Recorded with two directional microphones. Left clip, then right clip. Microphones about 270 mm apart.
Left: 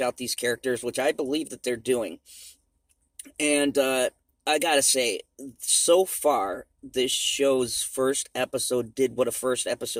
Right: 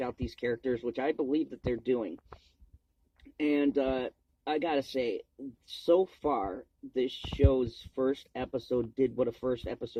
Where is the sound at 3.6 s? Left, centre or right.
Left.